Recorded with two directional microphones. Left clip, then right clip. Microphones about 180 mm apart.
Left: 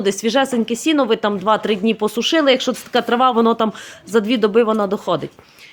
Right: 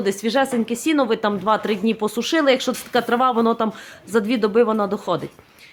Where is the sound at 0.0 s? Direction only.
30° left (ahead or behind).